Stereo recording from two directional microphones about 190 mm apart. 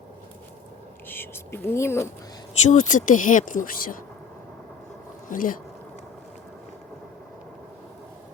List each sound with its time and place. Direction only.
1.0 s speech: 10° left (ahead or behind)
2.6 s speech: 40° left (ahead or behind)
5.3 s speech: 45° left (ahead or behind)